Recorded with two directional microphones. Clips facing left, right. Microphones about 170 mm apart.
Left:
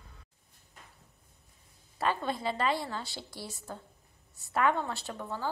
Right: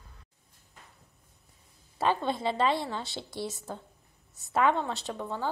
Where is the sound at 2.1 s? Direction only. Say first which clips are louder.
Right 3 dB; 25° right (ahead or behind).